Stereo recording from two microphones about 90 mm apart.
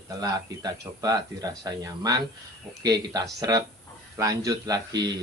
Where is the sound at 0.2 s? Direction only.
40° right (ahead or behind).